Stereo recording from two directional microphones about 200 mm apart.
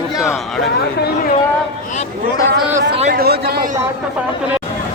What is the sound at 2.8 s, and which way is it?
Speech, 35° right (ahead or behind).